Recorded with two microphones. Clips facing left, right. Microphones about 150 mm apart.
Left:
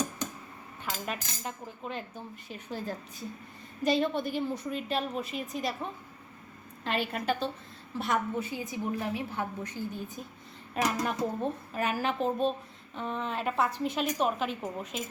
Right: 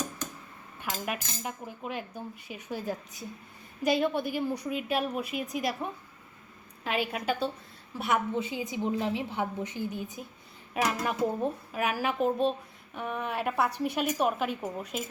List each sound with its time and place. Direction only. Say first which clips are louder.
0.8 s a woman's voice: right 2 dB; 10° right (ahead or behind)
8.4 s a woman's voice: right 2 dB; 20° right (ahead or behind)
10.8 s a woman's voice: right 1 dB; 5° right (ahead or behind)